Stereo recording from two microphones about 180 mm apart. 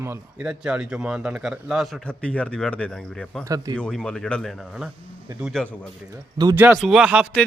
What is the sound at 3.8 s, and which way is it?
A man's voice, 5° left (ahead or behind).